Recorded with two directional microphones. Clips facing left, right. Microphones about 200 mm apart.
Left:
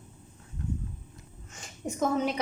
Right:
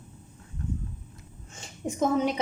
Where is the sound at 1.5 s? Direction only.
20° right (ahead or behind).